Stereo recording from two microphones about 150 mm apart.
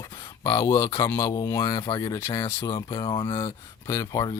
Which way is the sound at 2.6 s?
30° left (ahead or behind).